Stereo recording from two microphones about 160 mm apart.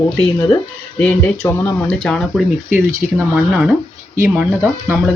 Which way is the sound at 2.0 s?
5° left (ahead or behind).